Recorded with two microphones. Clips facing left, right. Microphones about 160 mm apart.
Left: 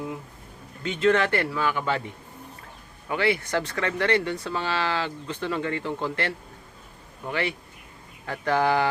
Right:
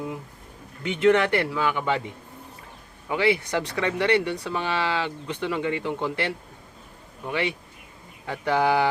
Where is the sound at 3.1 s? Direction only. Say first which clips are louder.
Right 1 dB; 15° right (ahead or behind).